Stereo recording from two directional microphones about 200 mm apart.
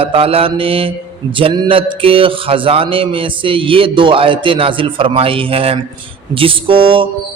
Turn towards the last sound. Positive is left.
turn(degrees=-25)  # may be behind; listen again after turning